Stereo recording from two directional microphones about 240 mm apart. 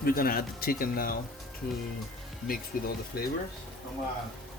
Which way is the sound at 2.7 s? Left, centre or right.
Left.